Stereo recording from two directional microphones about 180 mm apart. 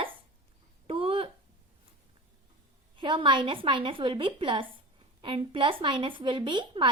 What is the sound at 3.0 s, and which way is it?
A woman's voice, 25° right (ahead or behind).